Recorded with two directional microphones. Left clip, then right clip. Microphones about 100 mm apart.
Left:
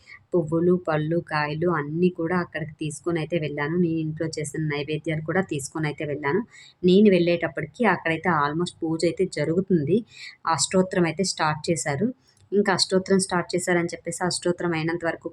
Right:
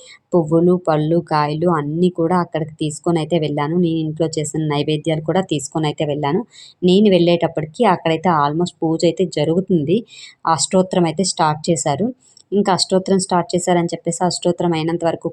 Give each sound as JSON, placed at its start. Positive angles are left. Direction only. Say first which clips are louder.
{"t": 0.3, "sound": "speech", "louder": "right 7 dB", "side_deg": -35}
{"t": 5.3, "sound": "speech", "louder": "right 5 dB", "side_deg": -30}